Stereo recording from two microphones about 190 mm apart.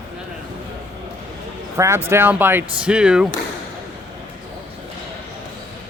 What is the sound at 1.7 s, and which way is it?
Speech, 15° right (ahead or behind).